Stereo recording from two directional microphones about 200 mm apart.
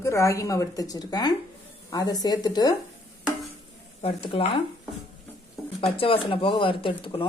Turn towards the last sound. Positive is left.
turn(degrees=25)  # may be behind; listen again after turning